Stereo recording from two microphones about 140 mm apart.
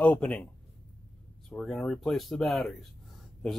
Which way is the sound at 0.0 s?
10° left (ahead or behind).